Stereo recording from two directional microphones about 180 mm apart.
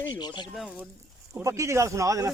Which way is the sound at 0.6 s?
5° right (ahead or behind).